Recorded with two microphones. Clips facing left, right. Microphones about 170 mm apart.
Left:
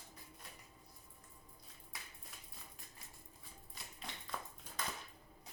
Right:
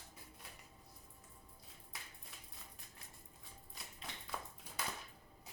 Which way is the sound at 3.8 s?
Centre (ahead or behind).